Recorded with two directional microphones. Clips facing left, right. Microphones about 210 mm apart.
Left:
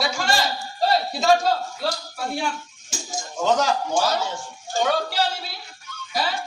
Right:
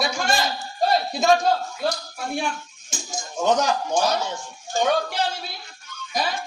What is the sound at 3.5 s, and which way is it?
Speech, 20° right (ahead or behind).